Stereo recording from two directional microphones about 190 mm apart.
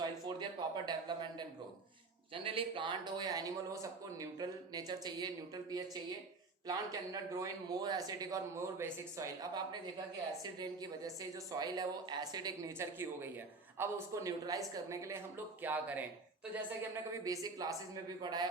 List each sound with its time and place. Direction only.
0.0 s a sound: 20° right (ahead or behind)
0.9 s a man's voice: 25° right (ahead or behind)
17.2 s a man's voice: 20° right (ahead or behind)